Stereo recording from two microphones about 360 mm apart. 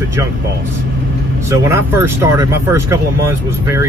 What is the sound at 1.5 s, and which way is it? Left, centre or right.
Speech, centre.